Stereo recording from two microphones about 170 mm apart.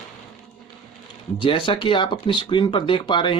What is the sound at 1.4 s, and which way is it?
Speech, 30° left (ahead or behind).